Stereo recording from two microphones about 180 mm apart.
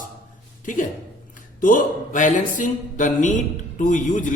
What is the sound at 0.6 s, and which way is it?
A woman's voice, 45° left (ahead or behind).